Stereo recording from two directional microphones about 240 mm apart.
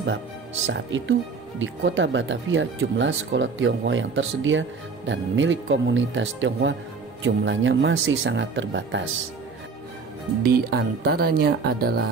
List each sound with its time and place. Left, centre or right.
0.7 s speech: right
10.4 s speech: right